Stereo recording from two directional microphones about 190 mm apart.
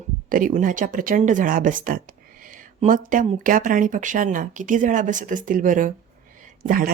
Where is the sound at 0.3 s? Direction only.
45° right (ahead or behind).